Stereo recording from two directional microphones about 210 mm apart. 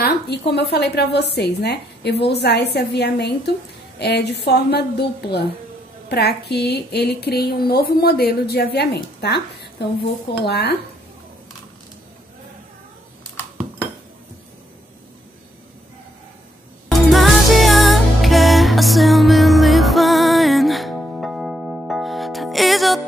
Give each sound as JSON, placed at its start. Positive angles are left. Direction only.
{"t": 0.0, "sound": "speech", "side_deg": 50}
{"t": 16.9, "sound": "music", "side_deg": 0}